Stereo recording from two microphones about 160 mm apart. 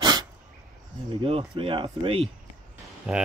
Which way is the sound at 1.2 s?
35° right (ahead or behind).